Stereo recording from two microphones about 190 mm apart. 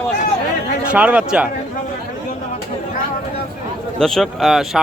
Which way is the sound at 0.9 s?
5° right (ahead or behind).